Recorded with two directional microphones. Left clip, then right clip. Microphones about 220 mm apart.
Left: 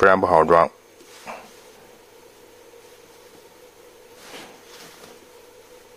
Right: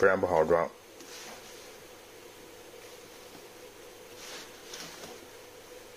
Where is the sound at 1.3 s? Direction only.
35° left (ahead or behind).